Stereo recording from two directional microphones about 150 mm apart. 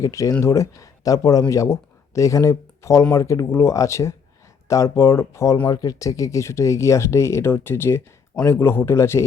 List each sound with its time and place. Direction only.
0.0 s speech: 20° left (ahead or behind)